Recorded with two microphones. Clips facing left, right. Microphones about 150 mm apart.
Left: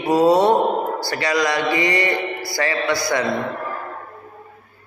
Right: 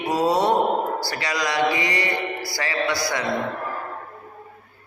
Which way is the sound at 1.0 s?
10° right (ahead or behind).